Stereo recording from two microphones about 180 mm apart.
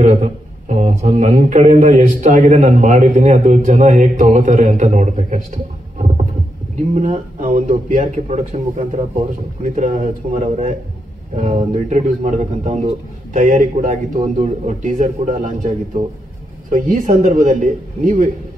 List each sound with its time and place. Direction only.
0.0 s speech: 40° right (ahead or behind)
5.9 s heart sounds: 40° right (ahead or behind)
6.9 s speech: 45° right (ahead or behind)